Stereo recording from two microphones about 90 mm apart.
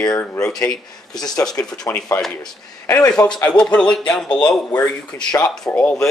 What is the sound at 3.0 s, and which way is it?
Speech, 45° left (ahead or behind).